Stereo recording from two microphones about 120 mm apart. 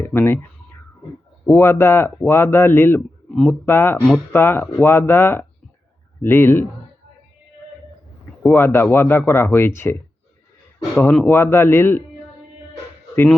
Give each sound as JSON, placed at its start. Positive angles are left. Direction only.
{"t": 0.0, "sound": "speech", "side_deg": 20}
{"t": 1.5, "sound": "speech", "side_deg": 20}
{"t": 8.4, "sound": "speech", "side_deg": 20}
{"t": 10.9, "sound": "speech", "side_deg": 10}